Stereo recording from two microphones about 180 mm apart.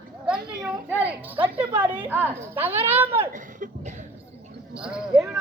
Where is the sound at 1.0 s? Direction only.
10° right (ahead or behind).